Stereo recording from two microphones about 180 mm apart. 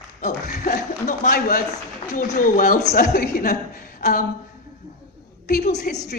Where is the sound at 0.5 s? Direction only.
45° left (ahead or behind).